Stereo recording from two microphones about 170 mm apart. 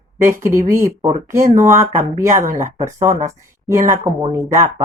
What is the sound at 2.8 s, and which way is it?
Speech, 20° right (ahead or behind).